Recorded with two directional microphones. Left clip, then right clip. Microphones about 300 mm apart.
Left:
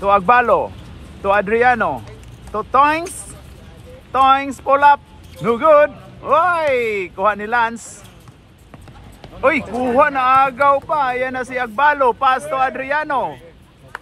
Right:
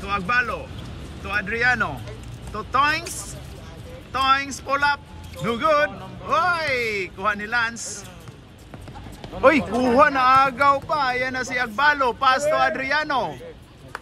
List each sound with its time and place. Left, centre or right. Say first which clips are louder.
0.0 s speech: left 10 dB; centre
4.1 s speech: left 7 dB; centre
9.2 s speech: even; centre